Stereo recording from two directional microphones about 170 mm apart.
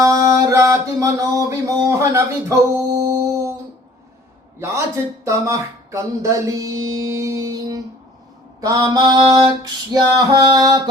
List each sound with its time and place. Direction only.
0.0 s a sound: 20° right (ahead or behind)
5.2 s music: 20° right (ahead or behind)
8.6 s male singing: 20° right (ahead or behind)